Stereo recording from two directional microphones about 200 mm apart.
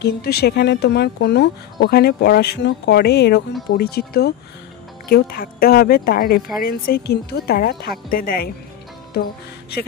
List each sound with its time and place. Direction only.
0.0 s speech: 55° left (ahead or behind)